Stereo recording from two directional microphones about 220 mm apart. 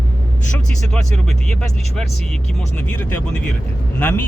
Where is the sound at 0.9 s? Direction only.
Centre (ahead or behind).